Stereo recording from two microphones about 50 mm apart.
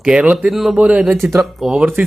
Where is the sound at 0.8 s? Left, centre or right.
Right.